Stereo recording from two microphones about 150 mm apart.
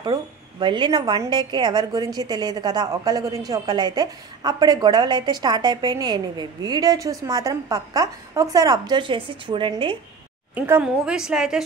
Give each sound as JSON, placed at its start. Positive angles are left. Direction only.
{"t": 0.0, "sound": "a woman's voice", "side_deg": -30}
{"t": 10.5, "sound": "a woman's voice", "side_deg": -10}